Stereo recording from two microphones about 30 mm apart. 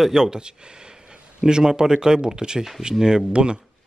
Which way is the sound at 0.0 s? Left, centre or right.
Right.